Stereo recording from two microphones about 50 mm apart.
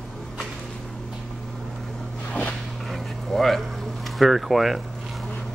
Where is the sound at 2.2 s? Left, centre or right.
Left.